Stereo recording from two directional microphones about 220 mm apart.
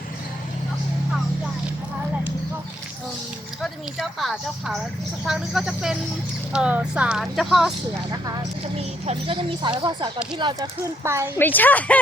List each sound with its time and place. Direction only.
3.6 s speech: centre (ahead or behind)
8.8 s speech: 25° right (ahead or behind)
11.3 s a woman's voice: 10° left (ahead or behind)